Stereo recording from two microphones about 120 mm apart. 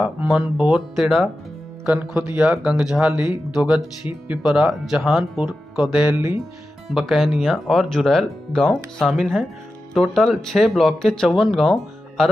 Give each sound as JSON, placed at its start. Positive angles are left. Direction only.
{"t": 0.2, "sound": "speech", "side_deg": -5}
{"t": 2.0, "sound": "speech", "side_deg": -10}
{"t": 6.1, "sound": "speech", "side_deg": -20}
{"t": 6.9, "sound": "speech", "side_deg": 0}